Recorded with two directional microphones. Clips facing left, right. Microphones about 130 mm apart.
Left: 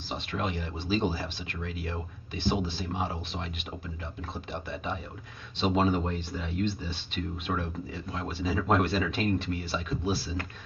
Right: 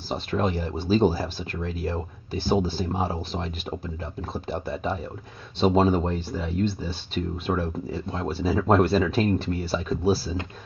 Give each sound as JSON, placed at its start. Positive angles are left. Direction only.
{"t": 0.1, "sound": "speech", "side_deg": -35}